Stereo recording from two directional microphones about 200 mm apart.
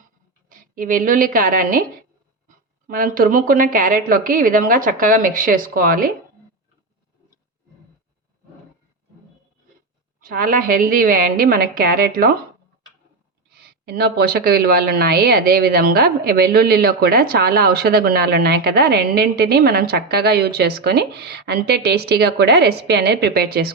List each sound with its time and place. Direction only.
0.4 s a woman's voice: 45° right (ahead or behind)
2.8 s a woman's voice: 45° right (ahead or behind)
10.2 s a woman's voice: 45° right (ahead or behind)
13.6 s a woman's voice: 50° right (ahead or behind)